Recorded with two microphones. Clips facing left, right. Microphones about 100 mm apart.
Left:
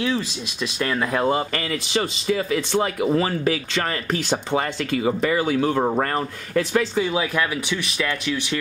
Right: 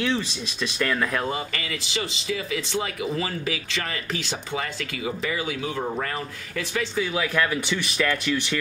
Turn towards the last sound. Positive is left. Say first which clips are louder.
# left 2 dB
turn(degrees=20)  # may be behind; listen again after turning